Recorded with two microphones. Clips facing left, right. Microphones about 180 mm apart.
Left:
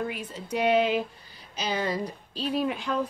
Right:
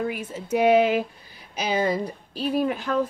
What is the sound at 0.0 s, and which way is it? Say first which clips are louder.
A woman's voice: right 4 dB; 5° right (ahead or behind).